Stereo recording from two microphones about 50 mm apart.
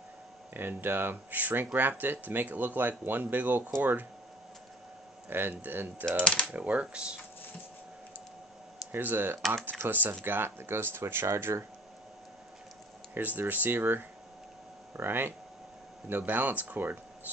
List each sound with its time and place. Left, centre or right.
0.6 s speech: right
5.3 s speech: right
6.2 s speech: centre
6.5 s speech: right
8.9 s speech: right
13.1 s speech: right